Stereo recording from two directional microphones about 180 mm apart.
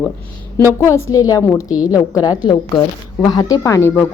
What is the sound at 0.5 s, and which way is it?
Speech, 15° left (ahead or behind).